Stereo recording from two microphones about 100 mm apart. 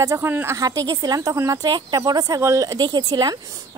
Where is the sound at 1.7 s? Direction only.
45° right (ahead or behind).